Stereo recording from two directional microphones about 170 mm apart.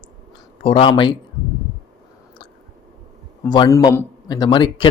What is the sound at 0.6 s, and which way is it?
Speech, 35° left (ahead or behind).